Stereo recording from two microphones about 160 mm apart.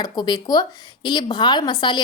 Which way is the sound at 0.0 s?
25° left (ahead or behind).